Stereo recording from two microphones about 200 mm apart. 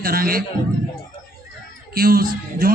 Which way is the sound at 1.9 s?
50° right (ahead or behind).